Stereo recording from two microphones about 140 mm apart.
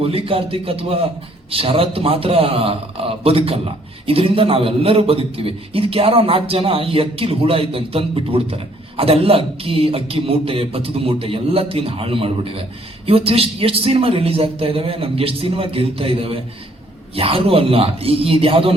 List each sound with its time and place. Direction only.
0.0 s a man's voice: 40° right (ahead or behind)